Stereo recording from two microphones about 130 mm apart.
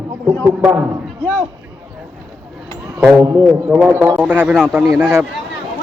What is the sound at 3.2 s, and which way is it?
Speech, 20° right (ahead or behind).